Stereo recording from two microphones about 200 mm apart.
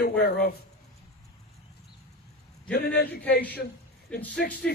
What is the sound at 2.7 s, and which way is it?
Speech, 50° left (ahead or behind).